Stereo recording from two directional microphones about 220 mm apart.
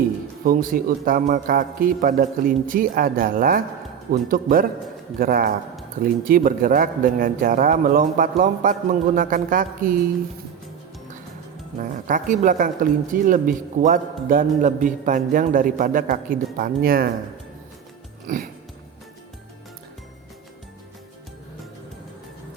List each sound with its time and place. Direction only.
0.4 s speech: 40° right (ahead or behind)
11.8 s speech: 35° right (ahead or behind)
18.3 s speech: 35° right (ahead or behind)